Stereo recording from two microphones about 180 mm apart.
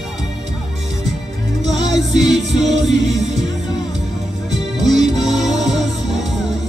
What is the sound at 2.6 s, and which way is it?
Music, 40° right (ahead or behind).